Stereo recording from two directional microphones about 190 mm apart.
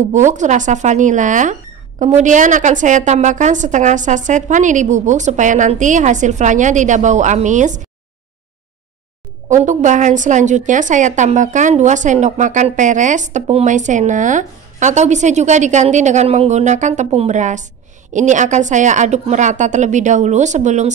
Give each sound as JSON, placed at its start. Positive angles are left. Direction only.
{"t": 0.1, "sound": "a woman's voice", "side_deg": -40}
{"t": 9.5, "sound": "a woman's voice", "side_deg": -40}